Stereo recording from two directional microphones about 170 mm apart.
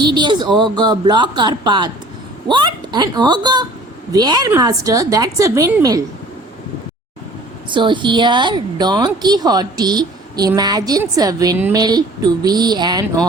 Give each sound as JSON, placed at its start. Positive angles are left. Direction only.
{"t": 0.0, "sound": "a woman's voice", "side_deg": -25}
{"t": 7.7, "sound": "a woman's voice", "side_deg": -30}